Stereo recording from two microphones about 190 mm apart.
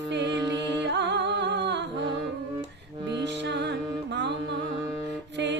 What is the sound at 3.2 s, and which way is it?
Music, 65° right (ahead or behind).